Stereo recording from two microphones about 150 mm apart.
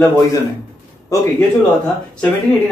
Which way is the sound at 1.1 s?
20° left (ahead or behind).